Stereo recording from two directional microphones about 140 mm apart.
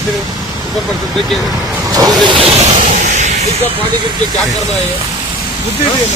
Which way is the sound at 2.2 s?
40° right (ahead or behind).